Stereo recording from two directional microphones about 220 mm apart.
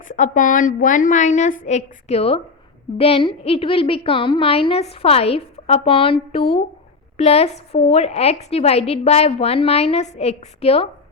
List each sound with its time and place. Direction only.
0.0 s a woman's voice: 35° left (ahead or behind)